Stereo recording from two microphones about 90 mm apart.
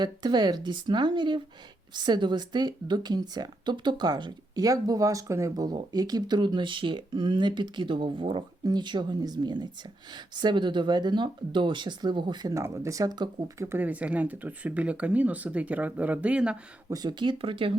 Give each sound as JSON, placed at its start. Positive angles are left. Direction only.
{"t": 0.0, "sound": "speech", "side_deg": -50}
{"t": 5.6, "sound": "speech", "side_deg": -50}
{"t": 8.6, "sound": "speech", "side_deg": -55}
{"t": 12.5, "sound": "speech", "side_deg": -35}
{"t": 13.6, "sound": "speech", "side_deg": -25}
{"t": 16.9, "sound": "speech", "side_deg": -50}